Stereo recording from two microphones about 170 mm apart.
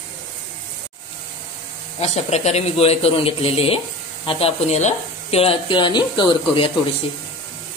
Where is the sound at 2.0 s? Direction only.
40° left (ahead or behind).